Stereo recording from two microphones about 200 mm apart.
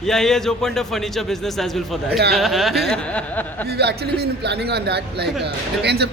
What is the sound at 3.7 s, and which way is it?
A man's voice, 55° right (ahead or behind).